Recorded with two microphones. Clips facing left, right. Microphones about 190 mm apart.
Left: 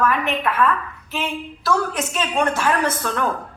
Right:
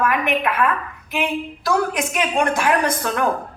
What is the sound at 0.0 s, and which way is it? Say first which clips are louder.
A woman's voice: right 1 dB; 15° right (ahead or behind).